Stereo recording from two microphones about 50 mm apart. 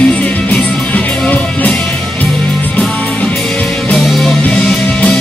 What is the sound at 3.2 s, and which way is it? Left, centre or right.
Music, left.